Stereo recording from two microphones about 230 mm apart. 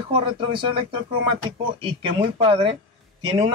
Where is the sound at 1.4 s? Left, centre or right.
Right.